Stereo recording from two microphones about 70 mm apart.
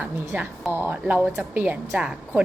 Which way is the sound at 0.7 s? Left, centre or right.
Right.